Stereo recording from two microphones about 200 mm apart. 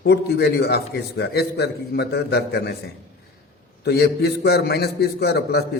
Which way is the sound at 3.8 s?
55° left (ahead or behind).